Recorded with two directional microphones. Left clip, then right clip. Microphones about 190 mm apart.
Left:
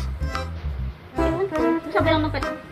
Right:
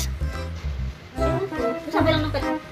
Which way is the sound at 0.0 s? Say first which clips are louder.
Left 3 dB; centre (ahead or behind).